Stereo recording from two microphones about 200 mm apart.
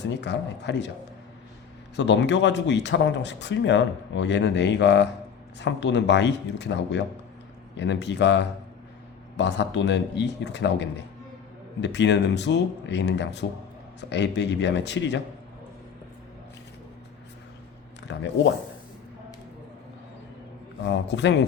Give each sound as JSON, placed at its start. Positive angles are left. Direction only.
{"t": 0.0, "sound": "speech", "side_deg": 60}
{"t": 2.0, "sound": "speech", "side_deg": 60}
{"t": 18.1, "sound": "speech", "side_deg": 60}
{"t": 20.8, "sound": "speech", "side_deg": 60}